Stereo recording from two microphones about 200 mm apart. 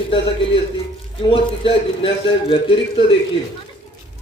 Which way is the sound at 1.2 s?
25° left (ahead or behind).